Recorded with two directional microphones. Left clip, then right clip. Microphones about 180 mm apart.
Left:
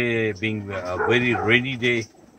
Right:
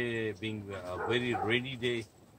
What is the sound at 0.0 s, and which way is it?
Speech, 5° right (ahead or behind).